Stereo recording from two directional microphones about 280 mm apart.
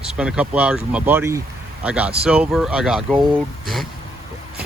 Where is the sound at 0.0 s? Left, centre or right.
Centre.